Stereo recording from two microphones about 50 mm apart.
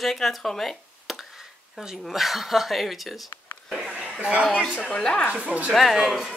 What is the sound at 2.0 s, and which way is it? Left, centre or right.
Speech, centre.